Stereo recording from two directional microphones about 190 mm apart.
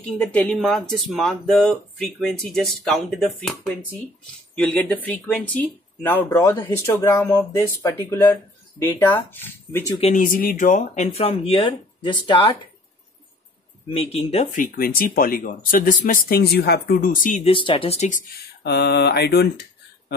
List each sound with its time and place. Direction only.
0.2 s speech: 5° left (ahead or behind)
10.1 s speech: 45° left (ahead or behind); by 12.5 s 25° left (ahead or behind)
14.1 s speech: 35° left (ahead or behind)
17.4 s speech: 25° left (ahead or behind)
18.6 s mantra: 60° left (ahead or behind)